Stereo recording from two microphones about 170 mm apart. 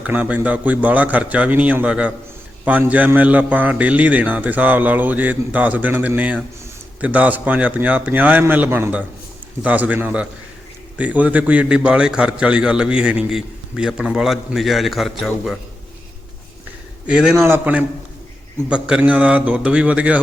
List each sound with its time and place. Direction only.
0.0 s a man's voice: 10° right (ahead or behind)
17.1 s a man's voice: 5° right (ahead or behind)